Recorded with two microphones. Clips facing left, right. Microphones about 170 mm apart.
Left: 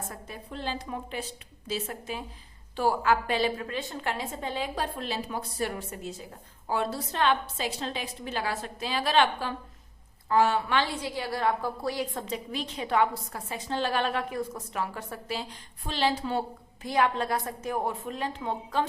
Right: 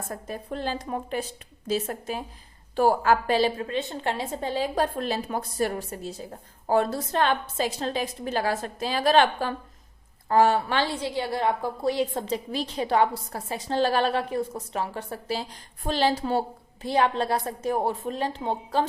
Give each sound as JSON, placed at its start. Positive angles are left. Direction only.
{"t": 0.1, "sound": "a woman's voice", "side_deg": -45}
{"t": 15.8, "sound": "a woman's voice", "side_deg": -45}
{"t": 16.8, "sound": "a woman's voice", "side_deg": -30}